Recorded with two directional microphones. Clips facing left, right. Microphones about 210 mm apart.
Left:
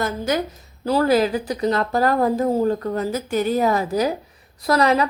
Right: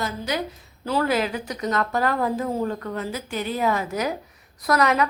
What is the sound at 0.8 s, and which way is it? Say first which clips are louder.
A woman's voice: left 5 dB; 40° left (ahead or behind).